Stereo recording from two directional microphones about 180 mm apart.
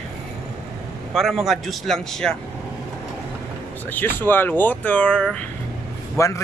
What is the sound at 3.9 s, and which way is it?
Speech, 10° left (ahead or behind).